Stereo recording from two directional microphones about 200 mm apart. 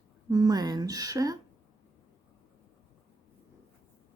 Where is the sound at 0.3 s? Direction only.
20° right (ahead or behind).